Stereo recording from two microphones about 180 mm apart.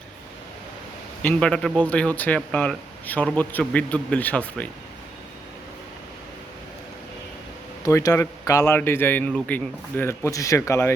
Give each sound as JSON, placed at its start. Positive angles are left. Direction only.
{"t": 1.2, "sound": "speech", "side_deg": 5}
{"t": 7.9, "sound": "a man's voice", "side_deg": 20}